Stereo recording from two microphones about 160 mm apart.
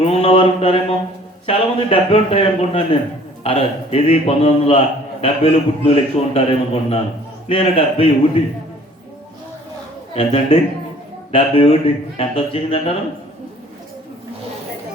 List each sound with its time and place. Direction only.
0.0 s mantra: 40° left (ahead or behind)
1.5 s a man's voice: 35° left (ahead or behind)
10.2 s a man's voice: 40° left (ahead or behind)